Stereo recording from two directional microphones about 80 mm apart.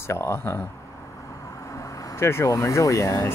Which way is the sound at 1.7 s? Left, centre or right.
Left.